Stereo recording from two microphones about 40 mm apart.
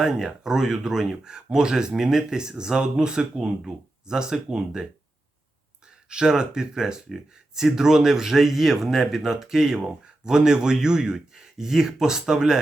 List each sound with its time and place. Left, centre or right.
0.0 s speech: centre
6.1 s speech: centre